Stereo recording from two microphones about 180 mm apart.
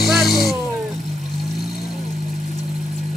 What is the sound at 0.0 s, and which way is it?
Vehicle, centre (ahead or behind).